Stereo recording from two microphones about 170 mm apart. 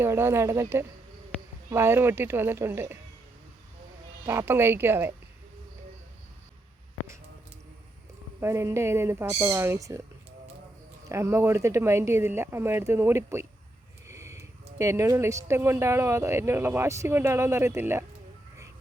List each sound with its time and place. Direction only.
0.0 s speech: 15° right (ahead or behind)
4.3 s speech: 15° right (ahead or behind)
8.4 s speech: 15° right (ahead or behind)
11.1 s speech: 15° right (ahead or behind)